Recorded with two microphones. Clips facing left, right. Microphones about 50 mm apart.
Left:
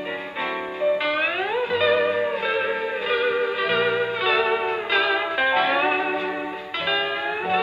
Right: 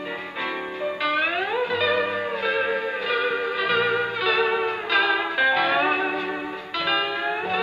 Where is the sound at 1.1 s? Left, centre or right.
Left.